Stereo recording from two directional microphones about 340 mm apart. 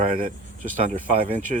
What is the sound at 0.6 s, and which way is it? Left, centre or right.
Speech, right.